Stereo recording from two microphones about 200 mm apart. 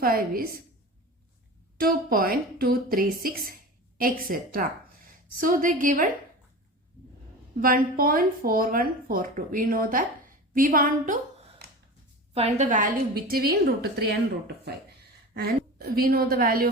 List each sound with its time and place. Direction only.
0.0 s speech: 45° right (ahead or behind)
1.8 s speech: 45° right (ahead or behind)
7.6 s speech: 45° right (ahead or behind)
12.3 s a woman's voice: 35° right (ahead or behind)